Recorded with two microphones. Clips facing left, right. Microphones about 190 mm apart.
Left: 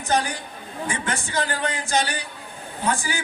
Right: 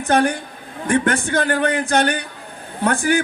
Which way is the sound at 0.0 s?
55° right (ahead or behind).